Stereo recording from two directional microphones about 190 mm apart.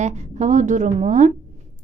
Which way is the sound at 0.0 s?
40° right (ahead or behind).